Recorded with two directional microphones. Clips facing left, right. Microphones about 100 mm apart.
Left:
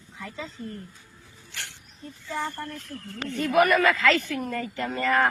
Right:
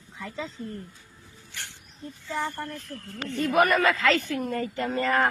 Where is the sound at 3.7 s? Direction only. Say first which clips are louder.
Left 1 dB; 30° right (ahead or behind).